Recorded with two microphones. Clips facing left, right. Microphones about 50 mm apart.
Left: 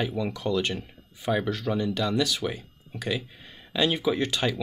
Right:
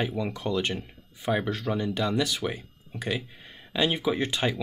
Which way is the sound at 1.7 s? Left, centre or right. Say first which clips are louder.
Left 2 dB; centre.